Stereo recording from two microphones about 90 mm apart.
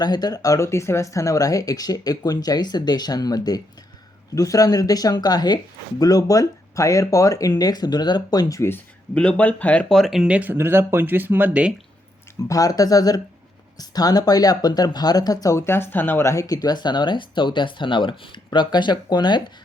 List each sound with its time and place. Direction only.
0.0 s speech: 50° left (ahead or behind)
9.1 s speech: 15° left (ahead or behind)
9.9 s speech: centre (ahead or behind)
10.3 s speech: 20° right (ahead or behind)
12.5 s speech: 40° left (ahead or behind)